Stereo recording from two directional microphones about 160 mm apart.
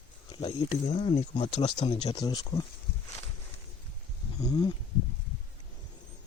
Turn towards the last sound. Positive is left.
turn(degrees=25)  # may be behind; listen again after turning